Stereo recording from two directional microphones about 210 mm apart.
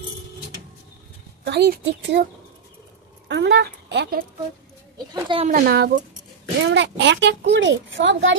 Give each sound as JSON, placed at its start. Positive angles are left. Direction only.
{"t": 1.5, "sound": "a child's voice", "side_deg": -50}
{"t": 3.3, "sound": "speech", "side_deg": -55}
{"t": 4.9, "sound": "speech", "side_deg": -20}
{"t": 5.5, "sound": "speech", "side_deg": -45}
{"t": 6.6, "sound": "a child's voice", "side_deg": -55}